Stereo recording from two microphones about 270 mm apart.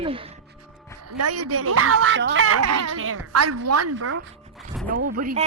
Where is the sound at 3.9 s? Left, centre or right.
Right.